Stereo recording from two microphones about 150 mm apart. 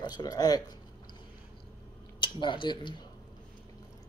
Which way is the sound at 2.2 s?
35° left (ahead or behind).